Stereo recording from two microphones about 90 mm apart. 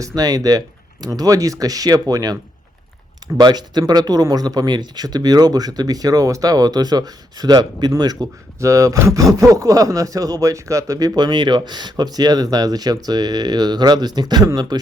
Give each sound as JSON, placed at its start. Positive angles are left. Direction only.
{"t": 0.2, "sound": "speech", "side_deg": -45}
{"t": 8.5, "sound": "speech", "side_deg": -35}